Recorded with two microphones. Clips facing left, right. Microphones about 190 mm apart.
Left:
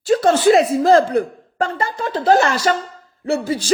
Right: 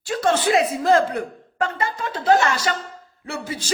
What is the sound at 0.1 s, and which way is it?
A woman's voice, 35° left (ahead or behind).